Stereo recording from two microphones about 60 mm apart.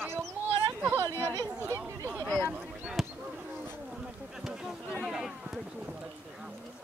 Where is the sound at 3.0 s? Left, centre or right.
Centre.